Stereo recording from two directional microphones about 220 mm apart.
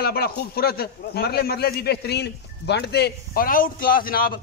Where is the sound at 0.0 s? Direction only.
45° left (ahead or behind).